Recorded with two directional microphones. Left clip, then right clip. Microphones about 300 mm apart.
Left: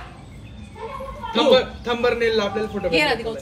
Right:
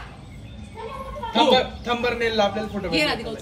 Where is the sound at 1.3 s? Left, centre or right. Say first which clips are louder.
Left 2 dB; centre.